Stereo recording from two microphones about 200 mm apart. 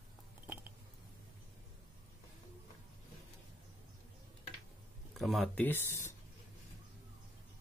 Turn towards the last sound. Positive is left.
turn(degrees=15)  # may be behind; listen again after turning